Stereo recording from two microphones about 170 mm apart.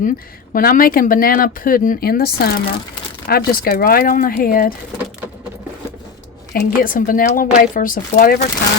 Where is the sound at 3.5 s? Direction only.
60° left (ahead or behind).